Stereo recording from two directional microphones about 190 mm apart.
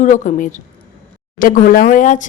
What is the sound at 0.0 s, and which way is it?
Speech, 40° left (ahead or behind).